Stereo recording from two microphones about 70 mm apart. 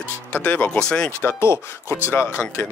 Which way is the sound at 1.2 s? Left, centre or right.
Left.